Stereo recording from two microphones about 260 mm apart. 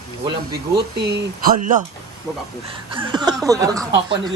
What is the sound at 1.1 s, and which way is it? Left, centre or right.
Speech, right.